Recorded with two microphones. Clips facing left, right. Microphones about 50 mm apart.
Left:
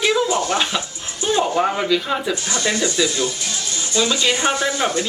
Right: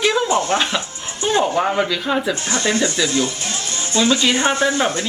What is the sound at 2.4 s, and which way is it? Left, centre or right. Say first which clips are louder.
Speech: right 2 dB; right.